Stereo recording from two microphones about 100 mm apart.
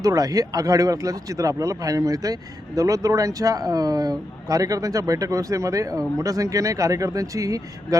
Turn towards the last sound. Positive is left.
turn(degrees=-35)  # may be behind; listen again after turning